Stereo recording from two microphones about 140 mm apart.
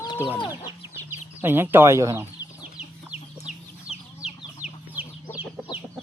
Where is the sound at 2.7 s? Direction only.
5° right (ahead or behind).